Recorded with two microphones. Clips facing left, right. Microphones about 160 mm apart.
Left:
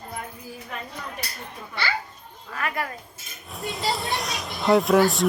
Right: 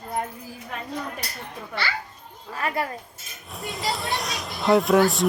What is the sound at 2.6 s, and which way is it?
Speech, 30° right (ahead or behind).